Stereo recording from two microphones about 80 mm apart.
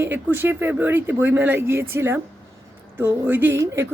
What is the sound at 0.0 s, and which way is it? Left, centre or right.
Speech, right.